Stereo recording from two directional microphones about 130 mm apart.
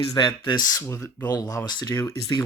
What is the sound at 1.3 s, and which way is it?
Speech, 30° left (ahead or behind).